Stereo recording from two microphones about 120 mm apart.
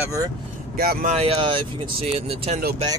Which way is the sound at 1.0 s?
60° right (ahead or behind).